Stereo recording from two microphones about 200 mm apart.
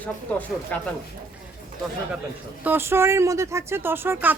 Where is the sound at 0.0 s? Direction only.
10° left (ahead or behind).